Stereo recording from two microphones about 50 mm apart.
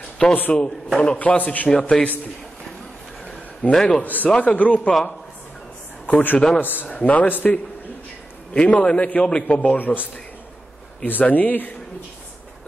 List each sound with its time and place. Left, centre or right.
0.2 s a man's voice: left
1.7 s speech: centre
3.7 s speech: centre
4.0 s a man's voice: left
4.3 s a man's voice: centre
6.0 s a man's voice: left
8.5 s a man's voice: left
9.8 s a man's voice: left
11.1 s a man's voice: left